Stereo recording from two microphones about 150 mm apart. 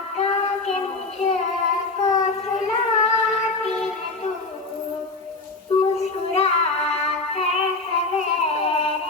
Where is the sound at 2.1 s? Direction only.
50° left (ahead or behind).